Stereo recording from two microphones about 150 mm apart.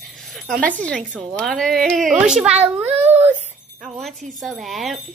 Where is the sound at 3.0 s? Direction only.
50° right (ahead or behind).